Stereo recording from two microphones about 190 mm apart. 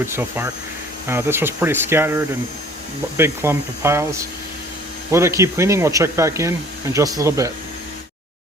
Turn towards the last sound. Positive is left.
turn(degrees=-15)  # may be behind; listen again after turning